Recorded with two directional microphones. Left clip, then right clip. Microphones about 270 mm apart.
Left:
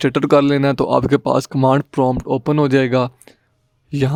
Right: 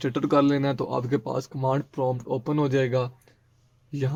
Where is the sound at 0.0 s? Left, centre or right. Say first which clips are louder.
Left 8 dB; left.